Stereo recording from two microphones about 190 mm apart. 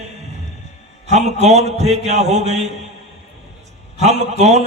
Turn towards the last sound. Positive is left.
turn(degrees=-35)  # may be behind; listen again after turning